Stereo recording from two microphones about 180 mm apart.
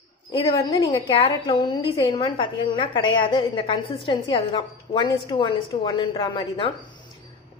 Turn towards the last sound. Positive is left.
turn(degrees=30)  # may be behind; listen again after turning